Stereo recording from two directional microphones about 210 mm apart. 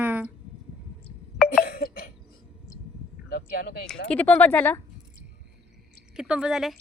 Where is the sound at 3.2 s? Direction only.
45° left (ahead or behind).